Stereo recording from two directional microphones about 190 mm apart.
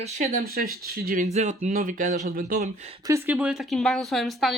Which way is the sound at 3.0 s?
15° right (ahead or behind).